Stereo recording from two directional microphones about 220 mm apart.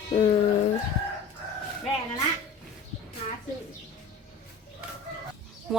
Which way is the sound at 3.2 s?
25° left (ahead or behind).